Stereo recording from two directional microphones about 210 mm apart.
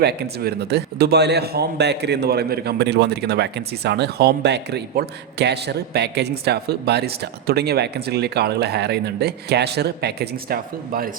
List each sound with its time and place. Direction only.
0.0 s a man's voice: 50° right (ahead or behind)